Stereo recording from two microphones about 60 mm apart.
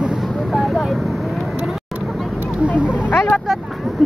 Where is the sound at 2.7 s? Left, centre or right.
Centre.